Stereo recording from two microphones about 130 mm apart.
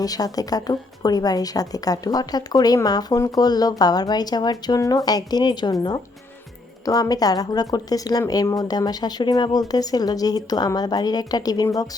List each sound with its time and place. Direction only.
0.0 s a woman's voice: 30° left (ahead or behind)
6.8 s a woman's voice: 30° left (ahead or behind)